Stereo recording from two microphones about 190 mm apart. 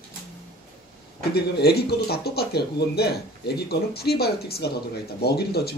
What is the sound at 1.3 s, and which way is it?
Speech, 55° left (ahead or behind).